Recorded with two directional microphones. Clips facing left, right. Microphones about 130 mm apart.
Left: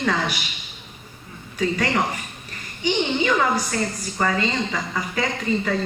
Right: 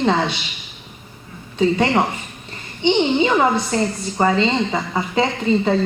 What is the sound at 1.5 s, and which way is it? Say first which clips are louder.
A woman's voice: right 6 dB; 25° right (ahead or behind).